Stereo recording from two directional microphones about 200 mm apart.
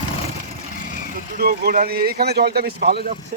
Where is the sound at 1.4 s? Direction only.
50° right (ahead or behind).